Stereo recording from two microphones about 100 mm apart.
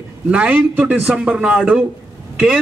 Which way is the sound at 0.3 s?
15° right (ahead or behind).